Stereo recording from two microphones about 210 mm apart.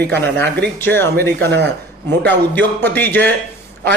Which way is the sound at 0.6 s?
10° left (ahead or behind).